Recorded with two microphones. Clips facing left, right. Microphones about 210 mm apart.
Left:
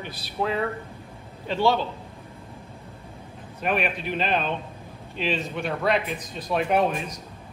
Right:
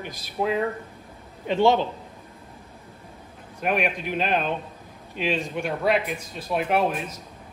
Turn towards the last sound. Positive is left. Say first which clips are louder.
# left 1 dB
turn(degrees=-5)  # may be behind; listen again after turning